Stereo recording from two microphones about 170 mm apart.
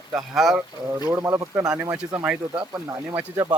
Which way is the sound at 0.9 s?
20° right (ahead or behind).